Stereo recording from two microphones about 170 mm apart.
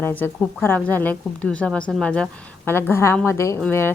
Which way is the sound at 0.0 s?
10° left (ahead or behind).